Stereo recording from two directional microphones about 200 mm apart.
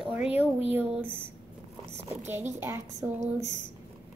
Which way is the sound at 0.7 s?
10° right (ahead or behind).